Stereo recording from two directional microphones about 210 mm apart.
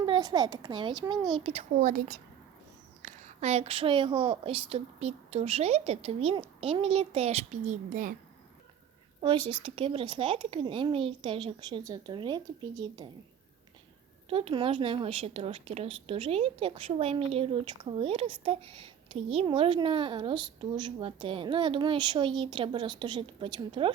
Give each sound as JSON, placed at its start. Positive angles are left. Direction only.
{"t": 0.0, "sound": "a woman's voice", "side_deg": -20}
{"t": 9.5, "sound": "a woman's voice", "side_deg": -25}
{"t": 14.3, "sound": "a woman's voice", "side_deg": -25}